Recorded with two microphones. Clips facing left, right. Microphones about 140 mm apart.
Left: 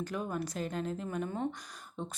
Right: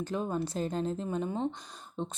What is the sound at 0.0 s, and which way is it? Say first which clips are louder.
Speech: right 3 dB; 25° right (ahead or behind).